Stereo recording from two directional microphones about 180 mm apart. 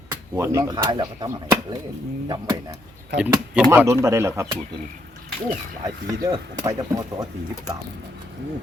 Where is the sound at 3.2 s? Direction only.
5° right (ahead or behind).